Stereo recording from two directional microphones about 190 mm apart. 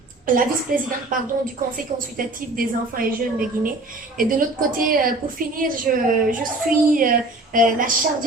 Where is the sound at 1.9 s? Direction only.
50° right (ahead or behind).